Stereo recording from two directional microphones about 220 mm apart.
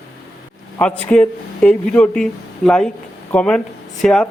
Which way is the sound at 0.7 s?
5° left (ahead or behind).